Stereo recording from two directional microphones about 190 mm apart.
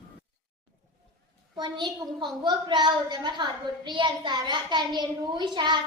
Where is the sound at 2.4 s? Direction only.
25° right (ahead or behind).